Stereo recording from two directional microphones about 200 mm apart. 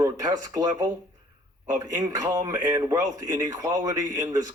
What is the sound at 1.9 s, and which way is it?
Speech, 20° right (ahead or behind).